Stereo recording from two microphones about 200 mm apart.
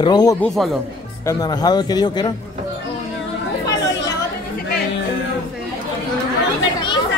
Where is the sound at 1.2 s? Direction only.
20° left (ahead or behind).